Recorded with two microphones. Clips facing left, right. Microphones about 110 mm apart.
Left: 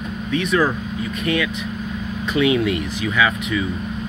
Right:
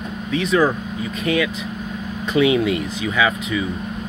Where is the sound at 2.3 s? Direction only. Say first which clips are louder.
Right 1 dB; 25° right (ahead or behind).